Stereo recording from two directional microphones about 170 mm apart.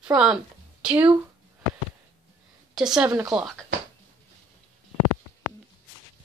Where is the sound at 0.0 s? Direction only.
5° right (ahead or behind).